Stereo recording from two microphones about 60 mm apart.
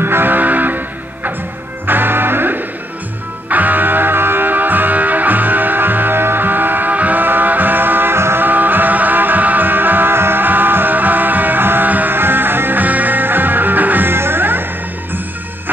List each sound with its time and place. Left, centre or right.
0.0 s music: right